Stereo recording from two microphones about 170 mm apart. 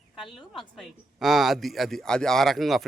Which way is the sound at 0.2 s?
Centre (ahead or behind).